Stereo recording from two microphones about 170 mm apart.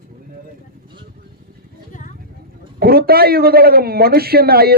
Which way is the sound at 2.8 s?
65° right (ahead or behind).